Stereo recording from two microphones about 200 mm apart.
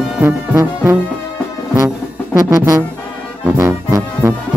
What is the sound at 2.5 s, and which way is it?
Music, 15° right (ahead or behind).